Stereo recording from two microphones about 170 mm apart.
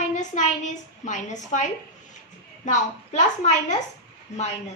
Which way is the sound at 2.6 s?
45° left (ahead or behind).